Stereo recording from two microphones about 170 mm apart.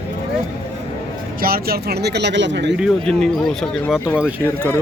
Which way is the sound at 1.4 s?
60° right (ahead or behind).